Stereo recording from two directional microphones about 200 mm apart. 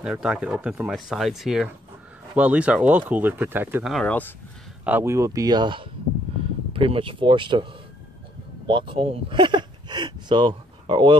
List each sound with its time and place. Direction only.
0.0 s speech: 5° right (ahead or behind)
3.9 s speech: 5° left (ahead or behind)
4.8 s speech: 10° right (ahead or behind)